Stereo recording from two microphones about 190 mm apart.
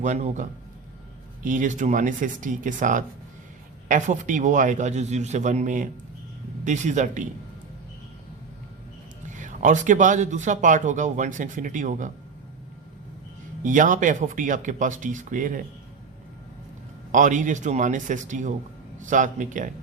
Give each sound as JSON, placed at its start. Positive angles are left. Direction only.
{"t": 0.0, "sound": "speech", "side_deg": -40}
{"t": 1.5, "sound": "speech", "side_deg": -40}
{"t": 9.3, "sound": "speech", "side_deg": -40}
{"t": 13.6, "sound": "speech", "side_deg": -40}
{"t": 17.1, "sound": "speech", "side_deg": -40}